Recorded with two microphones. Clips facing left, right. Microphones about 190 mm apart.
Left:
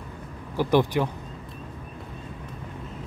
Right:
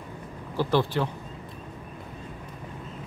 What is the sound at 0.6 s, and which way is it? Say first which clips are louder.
Speech: left 3 dB; 15° left (ahead or behind).